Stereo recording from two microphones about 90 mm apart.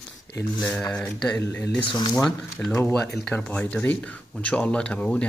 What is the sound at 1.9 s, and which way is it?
Speech, 55° left (ahead or behind).